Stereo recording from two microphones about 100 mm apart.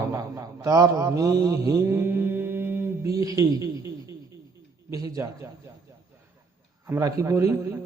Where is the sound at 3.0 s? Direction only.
35° right (ahead or behind).